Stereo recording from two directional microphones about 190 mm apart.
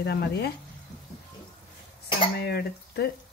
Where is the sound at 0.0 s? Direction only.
60° left (ahead or behind).